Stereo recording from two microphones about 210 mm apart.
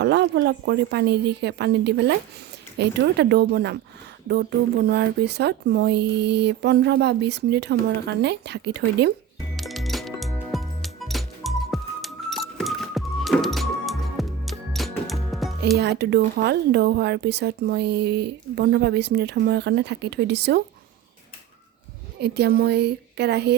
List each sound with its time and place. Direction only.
0.0 s speech: 55° right (ahead or behind)
9.6 s music: centre (ahead or behind)
15.8 s speech: 50° right (ahead or behind)
22.2 s speech: 50° right (ahead or behind)